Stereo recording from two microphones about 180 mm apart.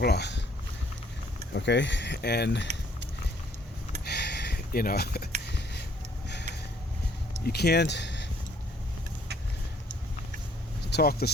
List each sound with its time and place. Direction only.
0.0 s speech: 65° left (ahead or behind)
1.5 s speech: 75° left (ahead or behind)
4.0 s a sound: 70° left (ahead or behind)
7.4 s speech: 65° left (ahead or behind)
10.8 s speech: 60° left (ahead or behind)